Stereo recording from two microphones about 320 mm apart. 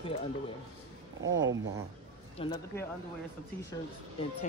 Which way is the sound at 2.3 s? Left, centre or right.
Centre.